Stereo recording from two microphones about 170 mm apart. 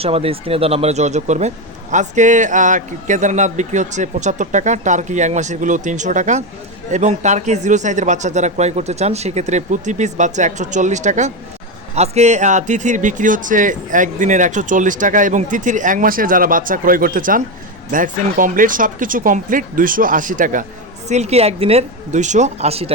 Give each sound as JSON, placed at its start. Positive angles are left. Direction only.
{"t": 0.0, "sound": "speech", "side_deg": -35}
{"t": 21.1, "sound": "speech", "side_deg": -40}